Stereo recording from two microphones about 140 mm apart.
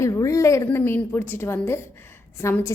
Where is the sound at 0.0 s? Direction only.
25° left (ahead or behind).